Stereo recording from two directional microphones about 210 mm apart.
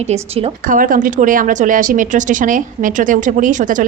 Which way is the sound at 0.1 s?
30° right (ahead or behind).